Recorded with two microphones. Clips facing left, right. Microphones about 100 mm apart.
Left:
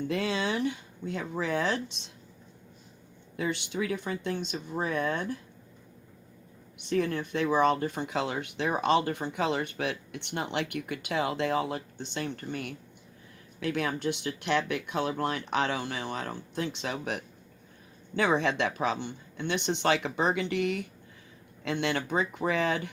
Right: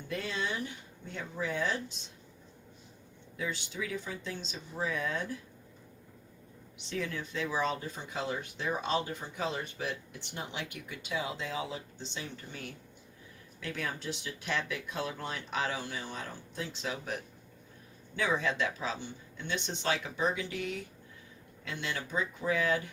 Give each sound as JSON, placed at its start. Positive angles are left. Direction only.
{"t": 0.1, "sound": "speech", "side_deg": 90}
{"t": 3.3, "sound": "speech", "side_deg": 65}
{"t": 6.7, "sound": "speech", "side_deg": 55}